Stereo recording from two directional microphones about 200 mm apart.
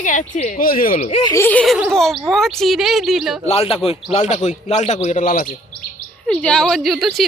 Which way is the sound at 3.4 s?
30° left (ahead or behind).